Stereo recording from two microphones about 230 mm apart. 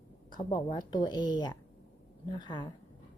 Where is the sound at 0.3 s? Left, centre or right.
Centre.